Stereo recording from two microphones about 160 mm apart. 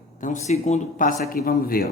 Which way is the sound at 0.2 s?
50° left (ahead or behind).